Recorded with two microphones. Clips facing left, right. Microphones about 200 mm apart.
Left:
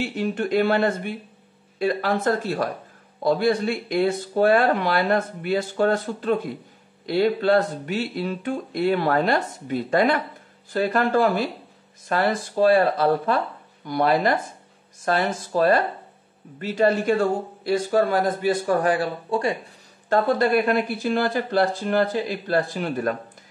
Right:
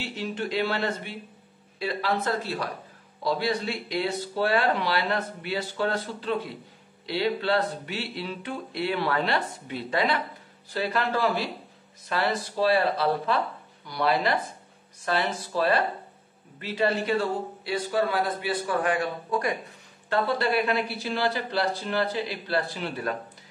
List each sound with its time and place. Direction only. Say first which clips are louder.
0.0 s speech: left 7 dB; 50° left (ahead or behind); by 19.5 s 30° left (ahead or behind)
20.1 s speech: left 6 dB; 45° left (ahead or behind)